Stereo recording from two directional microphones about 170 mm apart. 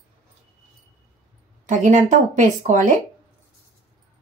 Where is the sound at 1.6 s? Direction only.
50° right (ahead or behind).